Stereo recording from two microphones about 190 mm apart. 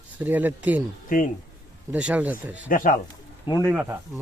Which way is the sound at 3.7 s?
5° right (ahead or behind).